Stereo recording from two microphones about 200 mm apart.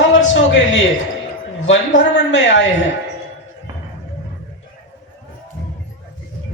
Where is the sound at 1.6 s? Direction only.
70° left (ahead or behind).